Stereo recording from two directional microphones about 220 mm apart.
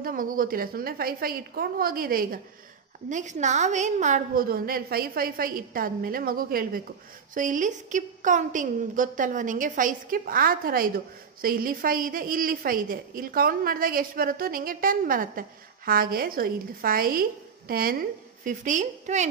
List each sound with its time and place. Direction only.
0.0 s a woman's voice: 40° right (ahead or behind)